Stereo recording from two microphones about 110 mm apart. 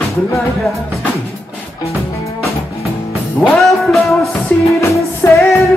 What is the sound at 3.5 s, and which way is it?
Music, centre (ahead or behind).